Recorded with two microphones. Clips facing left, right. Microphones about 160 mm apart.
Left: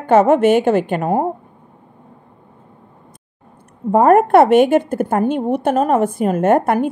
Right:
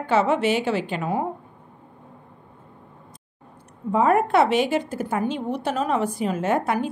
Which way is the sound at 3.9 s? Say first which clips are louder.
Left 8 dB; 55° left (ahead or behind).